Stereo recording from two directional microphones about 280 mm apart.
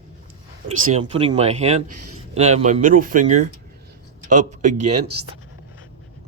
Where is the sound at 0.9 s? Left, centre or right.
Centre.